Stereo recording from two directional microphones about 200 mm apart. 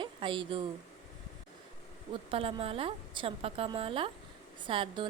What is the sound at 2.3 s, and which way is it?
A woman's voice, 30° right (ahead or behind).